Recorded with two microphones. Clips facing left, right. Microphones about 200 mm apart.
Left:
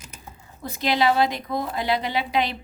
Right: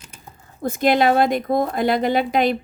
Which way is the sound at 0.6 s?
50° right (ahead or behind).